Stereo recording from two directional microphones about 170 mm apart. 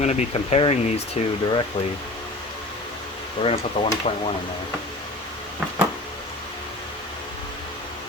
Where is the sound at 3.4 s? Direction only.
35° left (ahead or behind).